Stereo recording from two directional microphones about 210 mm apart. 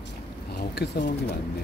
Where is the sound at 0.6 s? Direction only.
50° left (ahead or behind).